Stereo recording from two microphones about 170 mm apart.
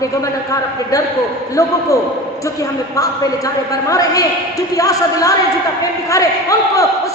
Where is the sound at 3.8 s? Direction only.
20° left (ahead or behind).